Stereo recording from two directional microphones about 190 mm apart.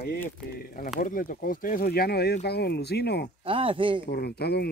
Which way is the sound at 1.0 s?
45° left (ahead or behind).